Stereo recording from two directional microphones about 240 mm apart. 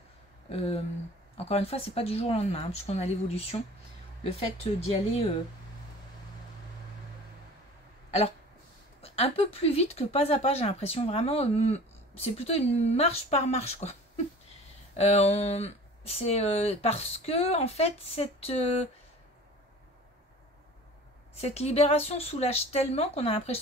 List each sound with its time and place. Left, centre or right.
0.5 s speech: left
9.0 s speech: left
15.0 s speech: left
21.4 s speech: left